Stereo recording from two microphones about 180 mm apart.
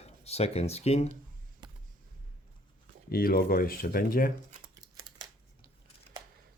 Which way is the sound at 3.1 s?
55° left (ahead or behind).